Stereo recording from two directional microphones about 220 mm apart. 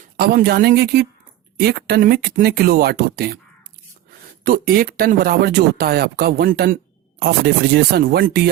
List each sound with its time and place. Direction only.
0.2 s speech: 45° right (ahead or behind)
4.4 s speech: 40° right (ahead or behind)